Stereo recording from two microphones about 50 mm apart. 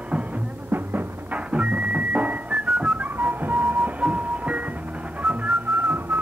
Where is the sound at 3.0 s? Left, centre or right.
Right.